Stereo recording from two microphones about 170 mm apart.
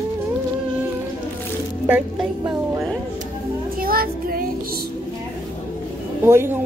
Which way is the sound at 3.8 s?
60° right (ahead or behind).